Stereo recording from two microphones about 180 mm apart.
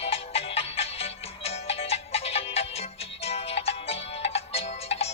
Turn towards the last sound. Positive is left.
turn(degrees=35)  # may be behind; listen again after turning